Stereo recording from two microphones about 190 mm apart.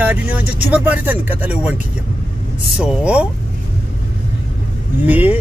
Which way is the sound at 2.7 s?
5° right (ahead or behind).